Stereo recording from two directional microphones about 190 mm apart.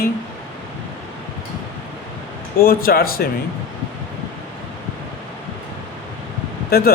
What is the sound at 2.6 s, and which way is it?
Speech, 50° left (ahead or behind).